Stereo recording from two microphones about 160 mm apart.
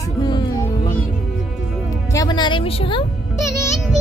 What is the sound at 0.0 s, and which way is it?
Music, 25° left (ahead or behind).